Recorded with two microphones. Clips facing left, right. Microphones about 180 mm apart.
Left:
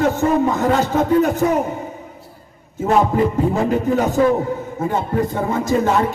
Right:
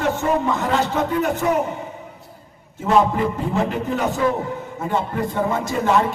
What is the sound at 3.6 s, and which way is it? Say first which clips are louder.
A man's voice: left 5 dB; 40° left (ahead or behind).